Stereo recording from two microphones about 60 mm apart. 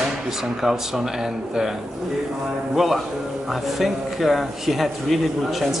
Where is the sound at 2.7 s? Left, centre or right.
Centre.